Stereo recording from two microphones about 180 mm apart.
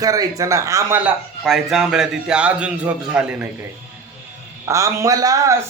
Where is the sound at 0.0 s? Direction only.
20° right (ahead or behind).